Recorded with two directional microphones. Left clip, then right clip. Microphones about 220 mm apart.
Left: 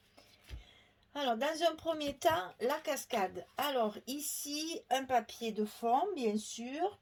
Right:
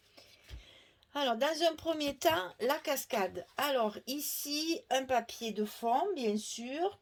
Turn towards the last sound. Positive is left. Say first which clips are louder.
# right 1 dB
turn(degrees=-35)  # may be behind; listen again after turning